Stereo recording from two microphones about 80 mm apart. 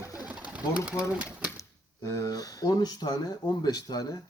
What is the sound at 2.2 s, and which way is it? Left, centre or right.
Speech, left.